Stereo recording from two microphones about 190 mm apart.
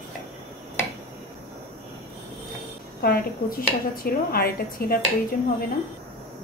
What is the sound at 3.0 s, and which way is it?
Speech, 50° left (ahead or behind).